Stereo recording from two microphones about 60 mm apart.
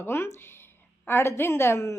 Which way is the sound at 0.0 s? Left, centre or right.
Left.